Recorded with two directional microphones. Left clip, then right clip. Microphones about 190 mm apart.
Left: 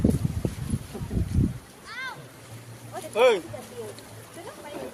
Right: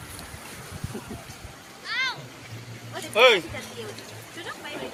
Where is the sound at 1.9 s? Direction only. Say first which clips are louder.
Right 8 dB; 60° left (ahead or behind).